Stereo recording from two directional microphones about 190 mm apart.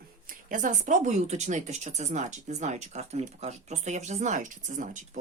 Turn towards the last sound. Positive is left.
turn(degrees=-40)  # may be behind; listen again after turning